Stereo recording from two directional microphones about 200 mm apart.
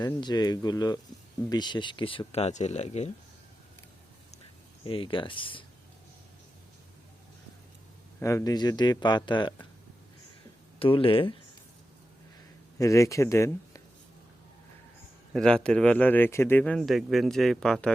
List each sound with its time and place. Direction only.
0.0 s speech: 20° left (ahead or behind)
4.8 s speech: 25° left (ahead or behind)
8.2 s speech: 15° left (ahead or behind)
10.8 s speech: 25° left (ahead or behind)
12.8 s speech: 15° left (ahead or behind)
15.3 s speech: 5° left (ahead or behind)